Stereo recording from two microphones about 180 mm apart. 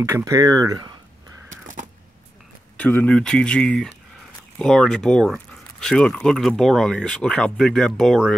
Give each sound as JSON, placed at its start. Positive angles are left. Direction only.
{"t": 0.0, "sound": "speech", "side_deg": -15}
{"t": 2.8, "sound": "speech", "side_deg": 10}